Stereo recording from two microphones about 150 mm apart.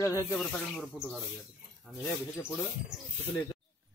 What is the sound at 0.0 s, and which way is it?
Speech, 20° left (ahead or behind).